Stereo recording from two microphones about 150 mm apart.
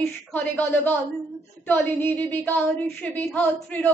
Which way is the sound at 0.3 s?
15° left (ahead or behind).